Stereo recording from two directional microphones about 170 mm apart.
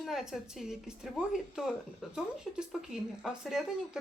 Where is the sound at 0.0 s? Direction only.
Centre (ahead or behind).